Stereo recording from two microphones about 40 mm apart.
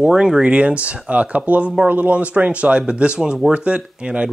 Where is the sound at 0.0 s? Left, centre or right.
Centre.